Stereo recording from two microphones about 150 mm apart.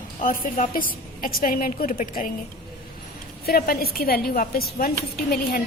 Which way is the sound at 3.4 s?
85° left.